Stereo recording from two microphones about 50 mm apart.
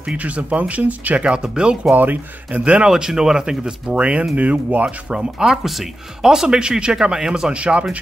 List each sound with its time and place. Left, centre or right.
0.2 s speech: right
1.2 s speech: centre
2.0 s speech: right
2.6 s speech: right
2.9 s speech: centre; by 4.8 s right
4.8 s speech: centre
7.5 s speech: right